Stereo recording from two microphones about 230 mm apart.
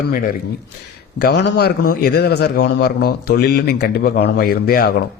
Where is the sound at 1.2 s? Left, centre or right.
Left.